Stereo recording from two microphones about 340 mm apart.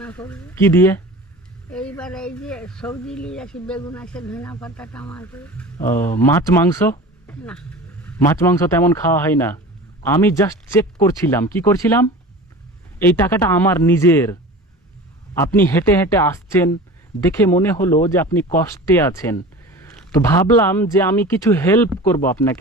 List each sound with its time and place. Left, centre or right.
0.0 s speech: centre
15.4 s speech: centre